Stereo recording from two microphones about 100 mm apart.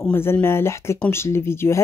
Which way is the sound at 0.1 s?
25° left (ahead or behind).